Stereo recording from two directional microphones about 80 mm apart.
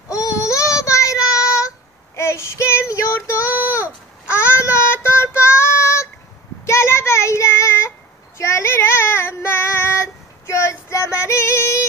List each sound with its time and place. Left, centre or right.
0.1 s child singing: left